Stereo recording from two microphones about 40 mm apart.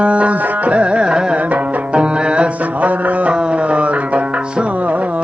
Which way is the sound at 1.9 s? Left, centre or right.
Right.